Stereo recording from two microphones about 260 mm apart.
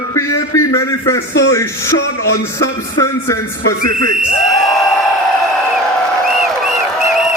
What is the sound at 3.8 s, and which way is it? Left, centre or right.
Speech, left.